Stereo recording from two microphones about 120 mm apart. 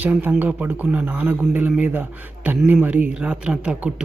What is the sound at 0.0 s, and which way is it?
A man's voice, 15° right (ahead or behind).